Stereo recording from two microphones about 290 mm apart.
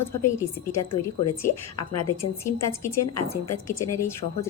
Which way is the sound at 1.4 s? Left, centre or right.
Left.